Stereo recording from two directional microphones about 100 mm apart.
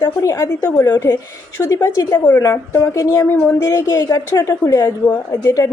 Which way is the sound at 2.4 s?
30° left (ahead or behind).